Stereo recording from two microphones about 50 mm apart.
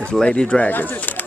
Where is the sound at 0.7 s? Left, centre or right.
Left.